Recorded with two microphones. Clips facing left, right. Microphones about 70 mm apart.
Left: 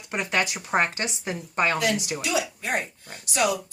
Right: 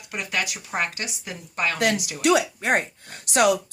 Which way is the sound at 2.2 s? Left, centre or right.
Right.